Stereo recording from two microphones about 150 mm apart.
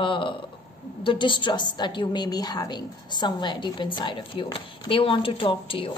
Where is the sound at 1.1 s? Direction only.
35° left (ahead or behind).